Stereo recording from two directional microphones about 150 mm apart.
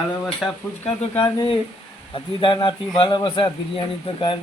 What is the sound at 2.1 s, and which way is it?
A man's voice, 35° left (ahead or behind).